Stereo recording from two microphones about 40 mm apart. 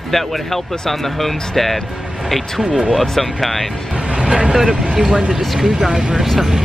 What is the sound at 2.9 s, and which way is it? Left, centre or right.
Speech, centre.